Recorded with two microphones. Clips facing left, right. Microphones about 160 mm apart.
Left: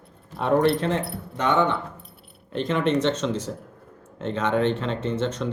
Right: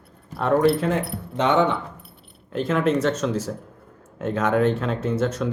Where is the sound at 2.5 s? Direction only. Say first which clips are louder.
Right 2 dB; 5° right (ahead or behind).